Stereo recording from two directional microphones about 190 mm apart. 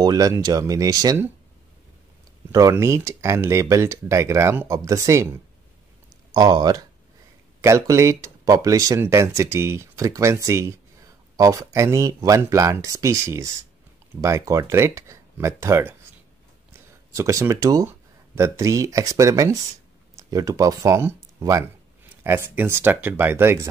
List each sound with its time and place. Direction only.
0.0 s speech: 20° right (ahead or behind)
2.5 s speech: 15° right (ahead or behind)
6.3 s speech: 20° right (ahead or behind)
17.1 s speech: 15° right (ahead or behind)